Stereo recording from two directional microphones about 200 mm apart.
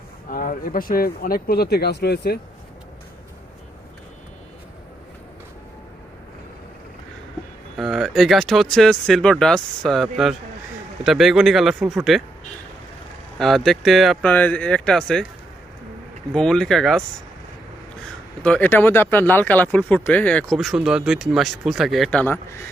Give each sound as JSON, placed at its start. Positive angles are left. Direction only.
{"t": 0.3, "sound": "speech", "side_deg": 45}
{"t": 7.8, "sound": "speech", "side_deg": 0}
{"t": 13.4, "sound": "speech", "side_deg": 0}
{"t": 16.3, "sound": "speech", "side_deg": 5}
{"t": 18.4, "sound": "speech", "side_deg": 5}